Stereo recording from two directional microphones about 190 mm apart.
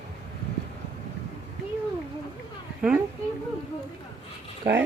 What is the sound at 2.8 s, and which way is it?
Speech, 5° right (ahead or behind).